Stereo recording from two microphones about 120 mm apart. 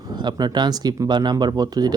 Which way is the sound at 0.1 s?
35° right (ahead or behind).